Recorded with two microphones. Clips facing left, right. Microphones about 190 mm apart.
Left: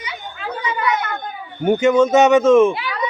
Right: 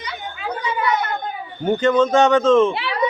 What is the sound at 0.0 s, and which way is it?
Chatter, 5° left (ahead or behind).